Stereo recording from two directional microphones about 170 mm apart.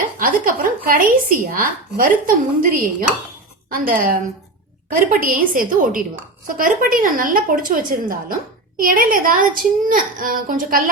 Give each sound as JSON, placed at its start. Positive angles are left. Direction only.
{"t": 0.2, "sound": "a woman's voice", "side_deg": -55}